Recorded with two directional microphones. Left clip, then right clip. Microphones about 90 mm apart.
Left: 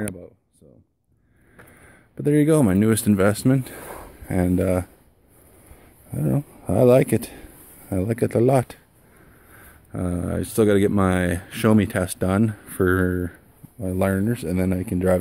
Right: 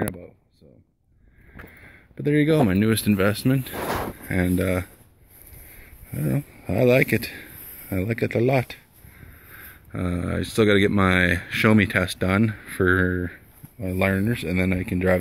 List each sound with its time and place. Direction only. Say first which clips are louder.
2.1 s speech: left 2 dB; 50° left (ahead or behind)
4.3 s speech: left 3 dB; 40° left (ahead or behind)
6.1 s speech: left 3 dB; 45° left (ahead or behind)
6.6 s speech: left 3 dB; 60° left (ahead or behind); by 8.2 s 45° left (ahead or behind)
8.2 s speech: left 3 dB; 70° left (ahead or behind); by 8.8 s 85° left
9.6 s speech: left 1 dB; 35° left (ahead or behind)
13.1 s speech: left 1 dB; 35° left (ahead or behind)
13.7 s speech: even; 50° left (ahead or behind)